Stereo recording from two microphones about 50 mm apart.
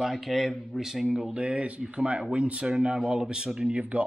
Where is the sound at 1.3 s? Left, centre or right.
Right.